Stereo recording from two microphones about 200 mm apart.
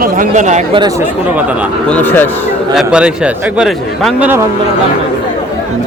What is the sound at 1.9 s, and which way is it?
Speech, 10° left (ahead or behind).